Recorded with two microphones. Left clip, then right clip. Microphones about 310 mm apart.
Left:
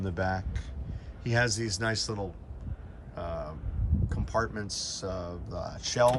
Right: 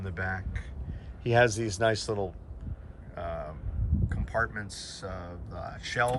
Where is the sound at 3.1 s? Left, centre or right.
Centre.